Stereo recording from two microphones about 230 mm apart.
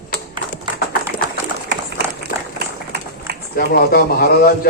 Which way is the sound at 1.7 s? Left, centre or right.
Right.